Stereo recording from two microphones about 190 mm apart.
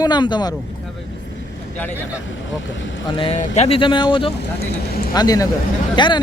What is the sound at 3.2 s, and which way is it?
Speech, 35° left (ahead or behind).